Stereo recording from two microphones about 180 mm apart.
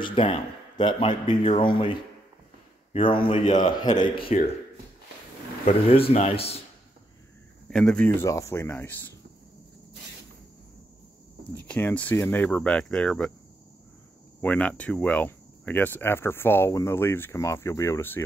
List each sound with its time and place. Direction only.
0.0 s speech: 30° left (ahead or behind)
2.9 s speech: 30° left (ahead or behind)
5.7 s speech: 30° left (ahead or behind)
7.7 s speech: 5° left (ahead or behind)
8.2 s speech: 15° left (ahead or behind)
11.5 s speech: 10° left (ahead or behind)
14.4 s speech: 10° left (ahead or behind)